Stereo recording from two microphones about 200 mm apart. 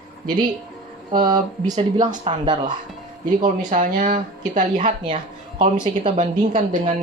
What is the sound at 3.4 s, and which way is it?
Speech, 40° right (ahead or behind).